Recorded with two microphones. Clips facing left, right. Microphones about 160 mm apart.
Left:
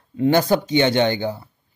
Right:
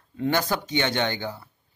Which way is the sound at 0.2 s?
25° left (ahead or behind).